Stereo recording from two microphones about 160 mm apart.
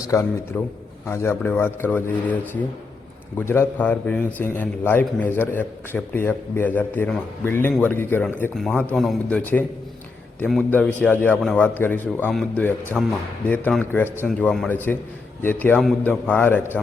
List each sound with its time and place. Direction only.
0.0 s a man's voice: 20° left (ahead or behind)
3.3 s a man's voice: 15° left (ahead or behind)
9.0 s speech: centre (ahead or behind)
9.4 s a man's voice: 10° left (ahead or behind)
12.3 s a man's voice: centre (ahead or behind)